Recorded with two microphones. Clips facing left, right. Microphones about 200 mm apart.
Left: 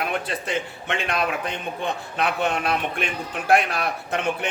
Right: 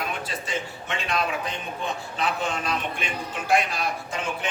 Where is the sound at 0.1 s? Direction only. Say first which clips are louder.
Left 4 dB; 60° left (ahead or behind).